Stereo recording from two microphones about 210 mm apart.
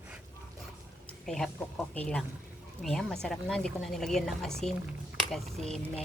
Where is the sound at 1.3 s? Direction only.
5° left (ahead or behind).